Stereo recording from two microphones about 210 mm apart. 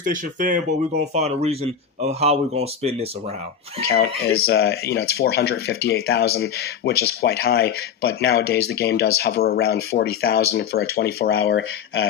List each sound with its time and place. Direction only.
0.0 s speech: 40° right (ahead or behind)
3.8 s speech: 50° left (ahead or behind)